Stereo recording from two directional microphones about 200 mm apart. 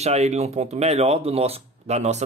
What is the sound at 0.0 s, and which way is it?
Speech, 30° right (ahead or behind).